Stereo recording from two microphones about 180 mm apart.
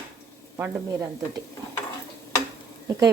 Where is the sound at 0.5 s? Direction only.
15° right (ahead or behind).